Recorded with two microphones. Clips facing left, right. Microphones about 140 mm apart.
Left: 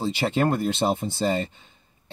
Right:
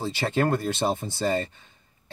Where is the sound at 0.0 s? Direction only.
20° left (ahead or behind).